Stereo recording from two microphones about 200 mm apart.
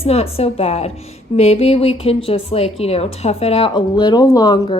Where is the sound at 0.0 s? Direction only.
30° left (ahead or behind).